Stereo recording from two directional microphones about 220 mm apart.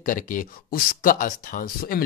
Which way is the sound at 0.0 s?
35° left (ahead or behind).